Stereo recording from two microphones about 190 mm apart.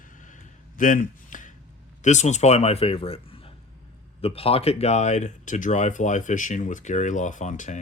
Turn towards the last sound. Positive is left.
turn(degrees=40)  # may be behind; listen again after turning